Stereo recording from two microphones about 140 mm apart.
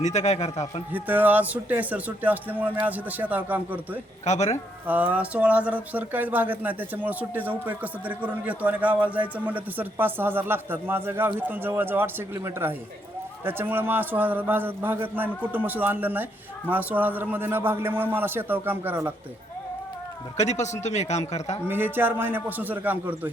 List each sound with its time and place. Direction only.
0.0 s a man's voice: 55° left (ahead or behind)
0.9 s a man's voice: 10° right (ahead or behind)
4.3 s speech: 55° left (ahead or behind)
4.9 s a man's voice: 10° right (ahead or behind)
20.3 s a man's voice: 55° left (ahead or behind)
21.7 s a man's voice: 15° right (ahead or behind)